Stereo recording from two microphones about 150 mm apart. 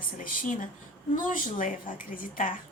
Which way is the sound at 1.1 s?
60° left (ahead or behind).